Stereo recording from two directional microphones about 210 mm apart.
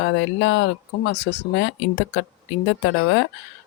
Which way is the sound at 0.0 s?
60° left (ahead or behind).